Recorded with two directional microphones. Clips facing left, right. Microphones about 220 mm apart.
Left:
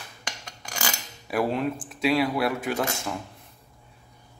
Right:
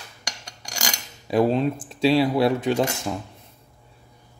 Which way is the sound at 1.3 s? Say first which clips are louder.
Right 5 dB; 20° right (ahead or behind).